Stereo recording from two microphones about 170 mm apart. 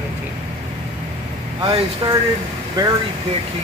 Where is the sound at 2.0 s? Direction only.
30° right (ahead or behind).